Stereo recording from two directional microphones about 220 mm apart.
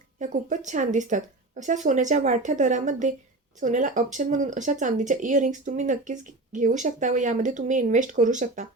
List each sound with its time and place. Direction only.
0.2 s speech: 35° right (ahead or behind)